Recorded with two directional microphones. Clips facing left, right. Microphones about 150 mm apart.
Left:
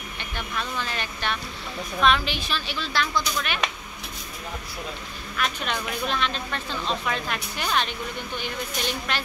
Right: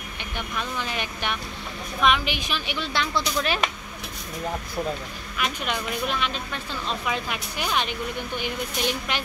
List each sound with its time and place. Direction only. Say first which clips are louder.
0.2 s speech: right 1 dB; 15° right (ahead or behind); by 3.6 s 30° right (ahead or behind)
5.4 s speech: even; 10° right (ahead or behind)